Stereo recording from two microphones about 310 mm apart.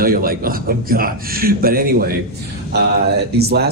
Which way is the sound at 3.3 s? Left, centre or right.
Right.